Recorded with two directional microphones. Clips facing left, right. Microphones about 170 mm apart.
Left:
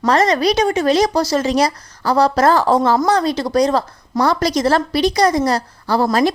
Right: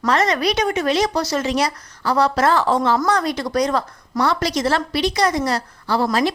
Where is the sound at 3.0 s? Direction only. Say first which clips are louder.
Left 4 dB; 30° left (ahead or behind).